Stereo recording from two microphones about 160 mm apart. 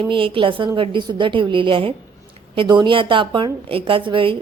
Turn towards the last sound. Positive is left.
turn(degrees=-30)  # may be behind; listen again after turning